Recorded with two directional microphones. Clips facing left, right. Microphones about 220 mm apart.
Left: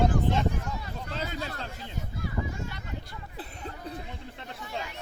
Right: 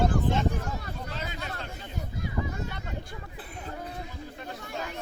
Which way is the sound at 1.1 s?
35° left (ahead or behind).